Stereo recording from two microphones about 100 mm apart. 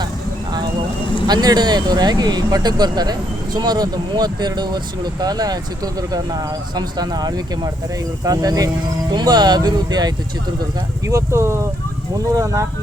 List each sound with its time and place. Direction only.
1.3 s speech: 45° right (ahead or behind)
11.0 s speech: 30° right (ahead or behind)